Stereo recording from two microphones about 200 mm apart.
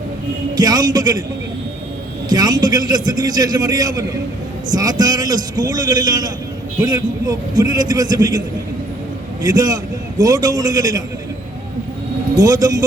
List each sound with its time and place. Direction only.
0.5 s a man's voice: 20° right (ahead or behind)
2.3 s a man's voice: 20° right (ahead or behind)
9.4 s a man's voice: 20° right (ahead or behind)
12.4 s a man's voice: 20° right (ahead or behind)